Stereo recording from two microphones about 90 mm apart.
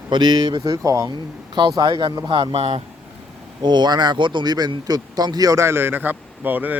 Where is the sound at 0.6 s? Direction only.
40° right (ahead or behind).